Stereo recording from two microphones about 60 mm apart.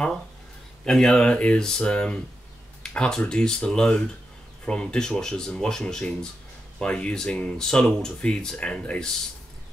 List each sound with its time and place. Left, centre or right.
0.8 s speech: centre